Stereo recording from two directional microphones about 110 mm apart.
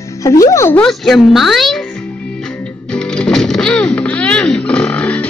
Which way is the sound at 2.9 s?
10° left (ahead or behind).